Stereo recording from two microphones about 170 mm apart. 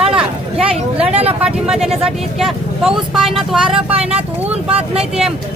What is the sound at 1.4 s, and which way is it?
Speech, 5° right (ahead or behind).